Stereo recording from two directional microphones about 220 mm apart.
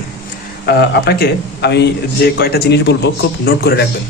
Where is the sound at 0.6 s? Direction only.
45° left (ahead or behind).